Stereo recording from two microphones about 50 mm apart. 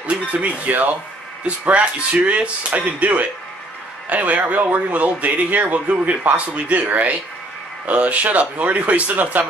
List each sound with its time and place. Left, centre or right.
0.0 s speech: right